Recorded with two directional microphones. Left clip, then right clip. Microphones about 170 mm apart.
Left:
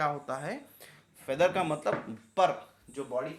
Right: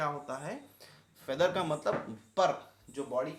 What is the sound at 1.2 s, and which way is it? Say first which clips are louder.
Speech: left 3 dB; 10° left (ahead or behind).